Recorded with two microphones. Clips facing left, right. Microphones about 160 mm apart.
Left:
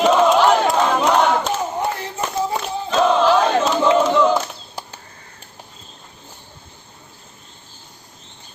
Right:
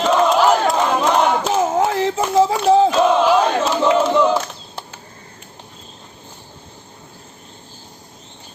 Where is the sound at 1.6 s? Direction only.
90° right.